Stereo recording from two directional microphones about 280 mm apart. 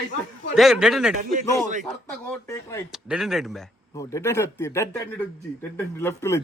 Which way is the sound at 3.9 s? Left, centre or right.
Centre.